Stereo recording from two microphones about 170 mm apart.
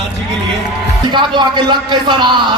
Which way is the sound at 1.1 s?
25° right (ahead or behind).